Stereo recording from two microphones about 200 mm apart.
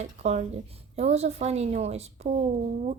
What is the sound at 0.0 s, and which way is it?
Speech, 35° right (ahead or behind).